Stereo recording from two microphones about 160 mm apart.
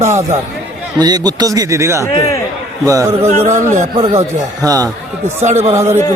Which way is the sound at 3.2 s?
45° right (ahead or behind).